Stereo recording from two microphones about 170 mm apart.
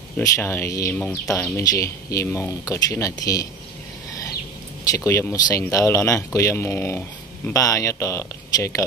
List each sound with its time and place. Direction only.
0.2 s speech: 15° left (ahead or behind)
1.6 s speech: 20° left (ahead or behind)
4.9 s speech: 15° left (ahead or behind)